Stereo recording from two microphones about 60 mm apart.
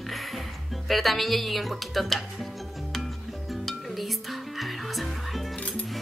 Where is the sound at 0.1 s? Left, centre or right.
Centre.